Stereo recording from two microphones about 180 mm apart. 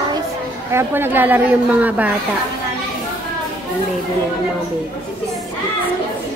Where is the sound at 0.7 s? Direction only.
10° right (ahead or behind).